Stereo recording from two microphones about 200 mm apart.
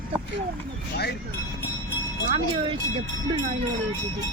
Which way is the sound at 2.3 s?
25° right (ahead or behind).